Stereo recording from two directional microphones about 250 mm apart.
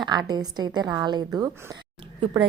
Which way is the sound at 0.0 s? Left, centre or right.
Centre.